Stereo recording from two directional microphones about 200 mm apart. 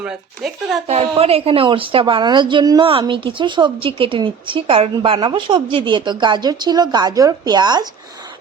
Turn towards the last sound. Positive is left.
turn(degrees=-20)  # may be behind; listen again after turning